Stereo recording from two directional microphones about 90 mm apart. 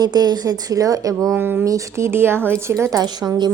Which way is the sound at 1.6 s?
35° right (ahead or behind).